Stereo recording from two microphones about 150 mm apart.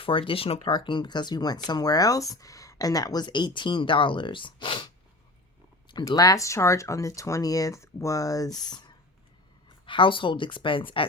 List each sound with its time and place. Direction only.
0.0 s a woman's voice: 35° left (ahead or behind)
0.6 s speech: 30° left (ahead or behind)
5.9 s speech: 25° left (ahead or behind)
9.8 s a woman's voice: 35° left (ahead or behind)